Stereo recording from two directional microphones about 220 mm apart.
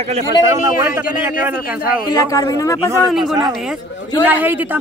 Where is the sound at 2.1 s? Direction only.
15° left (ahead or behind).